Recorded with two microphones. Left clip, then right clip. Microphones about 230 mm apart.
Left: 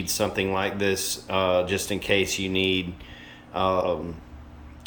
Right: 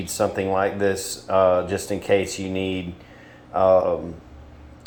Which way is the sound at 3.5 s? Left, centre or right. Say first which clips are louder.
Right 7 dB; centre.